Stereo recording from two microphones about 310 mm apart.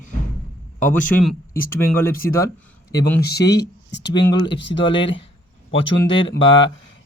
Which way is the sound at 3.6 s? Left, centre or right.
Left.